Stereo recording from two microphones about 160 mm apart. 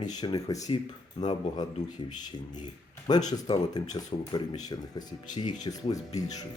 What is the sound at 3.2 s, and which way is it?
Speech, 25° left (ahead or behind).